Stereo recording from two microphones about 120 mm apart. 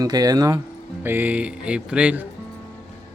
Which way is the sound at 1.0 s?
15° right (ahead or behind).